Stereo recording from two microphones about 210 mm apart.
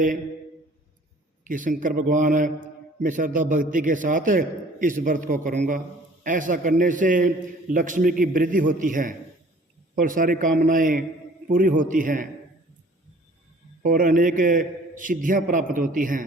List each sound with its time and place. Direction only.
1.5 s a man's voice: 40° right (ahead or behind)
13.8 s a man's voice: 40° right (ahead or behind)